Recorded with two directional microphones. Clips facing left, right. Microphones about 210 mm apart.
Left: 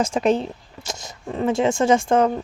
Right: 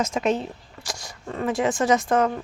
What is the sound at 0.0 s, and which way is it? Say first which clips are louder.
A woman's voice: left 4 dB; 30° left (ahead or behind).